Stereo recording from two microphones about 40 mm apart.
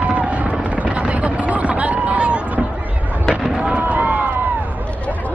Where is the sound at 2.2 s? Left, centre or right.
Right.